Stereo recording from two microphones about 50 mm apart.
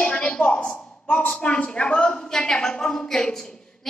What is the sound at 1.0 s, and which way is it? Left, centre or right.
A woman's voice, left.